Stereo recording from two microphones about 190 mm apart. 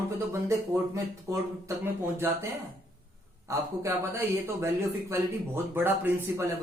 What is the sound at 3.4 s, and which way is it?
Speech, 15° right (ahead or behind).